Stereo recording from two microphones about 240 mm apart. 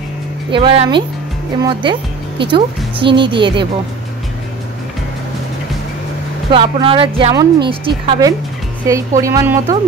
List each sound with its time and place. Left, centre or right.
0.5 s speech: right
6.5 s a woman's voice: right